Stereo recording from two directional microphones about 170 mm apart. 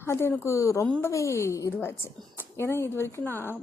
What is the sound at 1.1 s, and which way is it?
Speech, 15° left (ahead or behind).